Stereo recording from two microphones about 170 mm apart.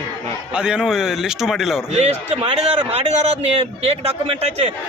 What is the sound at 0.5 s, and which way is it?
A man's voice, 5° right (ahead or behind).